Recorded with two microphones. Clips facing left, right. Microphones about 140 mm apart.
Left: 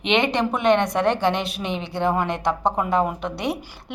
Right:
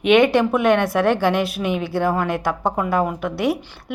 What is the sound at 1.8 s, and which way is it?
Speech, 20° left (ahead or behind).